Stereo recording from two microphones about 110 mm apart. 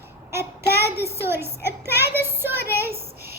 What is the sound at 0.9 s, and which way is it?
Speech, 25° right (ahead or behind).